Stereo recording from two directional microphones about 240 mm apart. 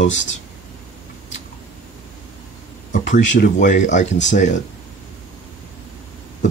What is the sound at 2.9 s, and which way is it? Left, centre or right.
Speech, left.